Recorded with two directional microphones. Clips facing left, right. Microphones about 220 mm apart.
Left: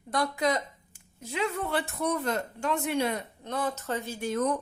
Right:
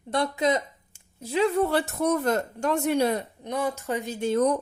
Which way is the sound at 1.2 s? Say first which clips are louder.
Right 8 dB; 35° right (ahead or behind).